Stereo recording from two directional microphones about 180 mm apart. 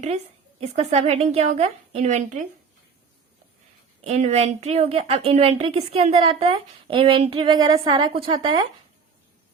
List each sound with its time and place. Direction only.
0.8 s a woman's voice: 35° right (ahead or behind)
4.0 s a woman's voice: 40° right (ahead or behind)